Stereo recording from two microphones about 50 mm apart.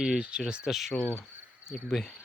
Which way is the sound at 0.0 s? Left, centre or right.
Centre.